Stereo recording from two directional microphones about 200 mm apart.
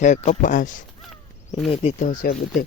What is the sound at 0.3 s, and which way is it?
Speech, 40° left (ahead or behind).